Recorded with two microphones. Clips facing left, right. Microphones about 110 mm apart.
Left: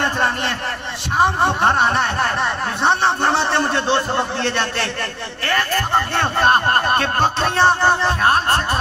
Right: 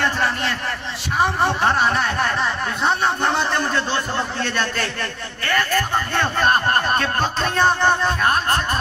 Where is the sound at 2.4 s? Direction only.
65° left (ahead or behind).